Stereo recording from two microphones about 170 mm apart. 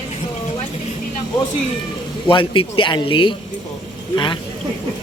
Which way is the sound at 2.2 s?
30° left (ahead or behind).